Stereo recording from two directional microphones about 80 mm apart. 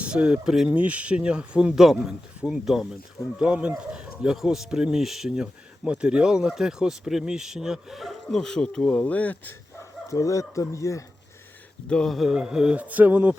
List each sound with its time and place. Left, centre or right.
0.0 s speech: centre
0.7 s speech: centre; by 9.6 s left
10.1 s speech: left
11.9 s speech: centre
12.1 s speech: centre; by 13.3 s right